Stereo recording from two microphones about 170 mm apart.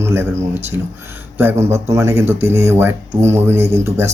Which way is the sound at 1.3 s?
15° right (ahead or behind).